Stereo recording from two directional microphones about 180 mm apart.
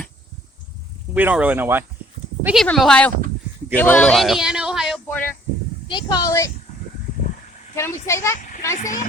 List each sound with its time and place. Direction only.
1.1 s speech: 10° right (ahead or behind)
5.0 s speech: 10° left (ahead or behind)
5.9 s speech: 25° left (ahead or behind)
7.8 s a child's voice: 15° left (ahead or behind)
8.4 s a sound: 45° left (ahead or behind)
8.8 s speech: 45° left (ahead or behind)